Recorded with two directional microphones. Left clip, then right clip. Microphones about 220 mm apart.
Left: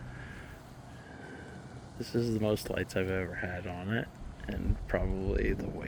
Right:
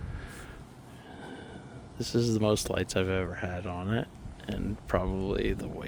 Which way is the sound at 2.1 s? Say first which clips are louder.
Right 4 dB; 30° right (ahead or behind).